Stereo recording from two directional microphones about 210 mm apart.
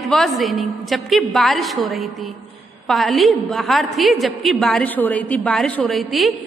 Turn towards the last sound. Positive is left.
turn(degrees=0)  # may be behind; listen again after turning